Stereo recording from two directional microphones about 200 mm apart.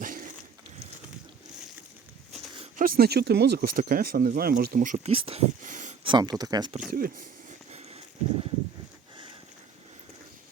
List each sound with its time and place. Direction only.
0.0 s a sound: 40° right (ahead or behind)
2.7 s speech: 45° right (ahead or behind)
5.1 s speech: 30° right (ahead or behind)
6.1 s speech: 20° right (ahead or behind)
6.9 s speech: 45° right (ahead or behind)
7.7 s a sound: 30° right (ahead or behind)